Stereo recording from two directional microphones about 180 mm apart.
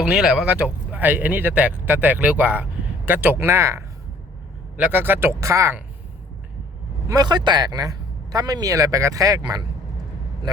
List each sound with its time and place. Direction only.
0.0 s speech: 5° right (ahead or behind)
7.1 s speech: 25° right (ahead or behind)